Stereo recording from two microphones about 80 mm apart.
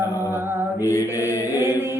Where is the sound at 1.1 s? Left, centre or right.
Left.